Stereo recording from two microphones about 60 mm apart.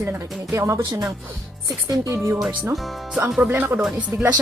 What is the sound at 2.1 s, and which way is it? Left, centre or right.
Speech, right.